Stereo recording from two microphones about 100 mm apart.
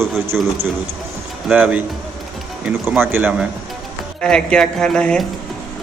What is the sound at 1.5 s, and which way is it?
Speech, 15° right (ahead or behind).